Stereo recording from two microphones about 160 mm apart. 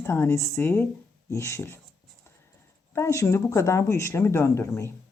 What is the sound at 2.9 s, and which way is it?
Speech, 20° left (ahead or behind).